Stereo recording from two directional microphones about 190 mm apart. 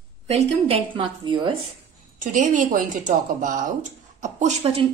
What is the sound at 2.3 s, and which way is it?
A woman's voice, 40° right (ahead or behind).